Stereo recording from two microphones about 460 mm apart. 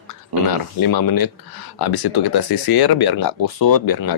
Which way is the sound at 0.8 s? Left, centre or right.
Left.